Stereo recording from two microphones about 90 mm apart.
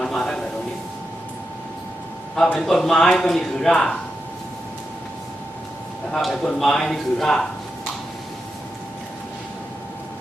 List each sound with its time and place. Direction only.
0.0 s a sound: 5° left (ahead or behind)
2.6 s a man's voice: 5° left (ahead or behind)
6.1 s a man's voice: 5° left (ahead or behind)